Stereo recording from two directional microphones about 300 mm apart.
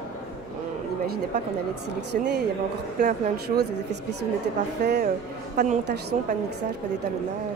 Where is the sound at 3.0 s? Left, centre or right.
Right.